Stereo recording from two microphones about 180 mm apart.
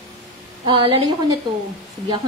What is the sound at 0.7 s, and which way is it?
Speech, 25° right (ahead or behind).